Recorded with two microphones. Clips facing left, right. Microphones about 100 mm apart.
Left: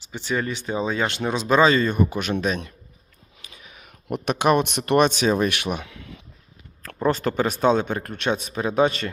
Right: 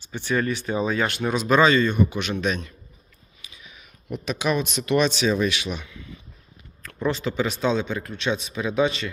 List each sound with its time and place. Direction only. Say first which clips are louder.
0.1 s speech: right 2 dB; 20° left (ahead or behind); by 2.3 s 40° left (ahead or behind)
3.4 s speech: left 2 dB; 50° left (ahead or behind)
5.8 s a sound: left 1 dB; 75° left (ahead or behind)
6.8 s speech: left 3 dB; 40° left (ahead or behind)